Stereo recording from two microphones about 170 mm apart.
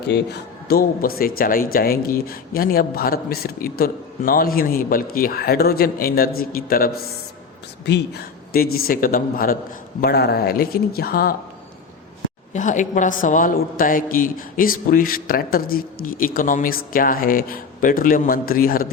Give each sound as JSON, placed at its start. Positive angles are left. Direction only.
{"t": 0.0, "sound": "a man's voice", "side_deg": 75}
{"t": 7.9, "sound": "a man's voice", "side_deg": 80}
{"t": 10.0, "sound": "a man's voice", "side_deg": 70}
{"t": 12.5, "sound": "a man's voice", "side_deg": 45}